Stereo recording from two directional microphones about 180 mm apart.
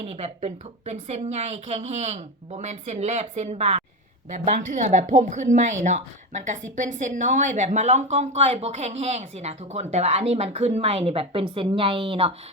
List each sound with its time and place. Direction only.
0.0 s a woman's voice: 35° right (ahead or behind)